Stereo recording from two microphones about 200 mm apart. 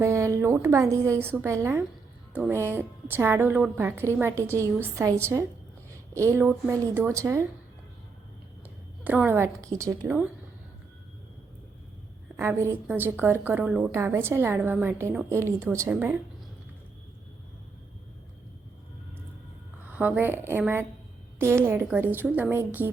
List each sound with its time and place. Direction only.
0.0 s a woman's voice: 15° right (ahead or behind)
9.0 s a woman's voice: 10° right (ahead or behind)
12.4 s a woman's voice: 10° right (ahead or behind)
19.9 s a woman's voice: 10° right (ahead or behind)